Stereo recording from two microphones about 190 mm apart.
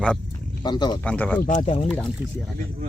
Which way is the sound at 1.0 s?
5° left (ahead or behind).